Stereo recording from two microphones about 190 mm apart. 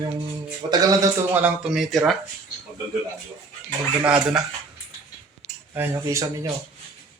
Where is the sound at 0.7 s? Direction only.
20° right (ahead or behind); by 2.1 s centre (ahead or behind).